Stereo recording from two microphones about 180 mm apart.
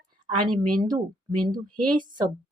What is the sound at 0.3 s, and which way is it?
Speech, 25° right (ahead or behind).